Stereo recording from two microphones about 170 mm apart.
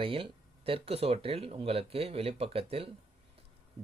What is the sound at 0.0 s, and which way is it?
Speech, 35° right (ahead or behind).